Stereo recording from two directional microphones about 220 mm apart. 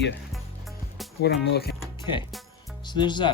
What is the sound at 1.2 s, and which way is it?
Speech, 50° left (ahead or behind).